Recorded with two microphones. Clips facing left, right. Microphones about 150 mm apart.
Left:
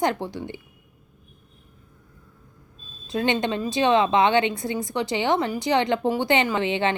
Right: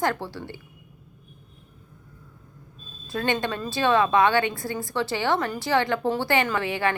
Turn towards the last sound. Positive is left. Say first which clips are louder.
# left 2 dB
turn(degrees=20)  # may be behind; listen again after turning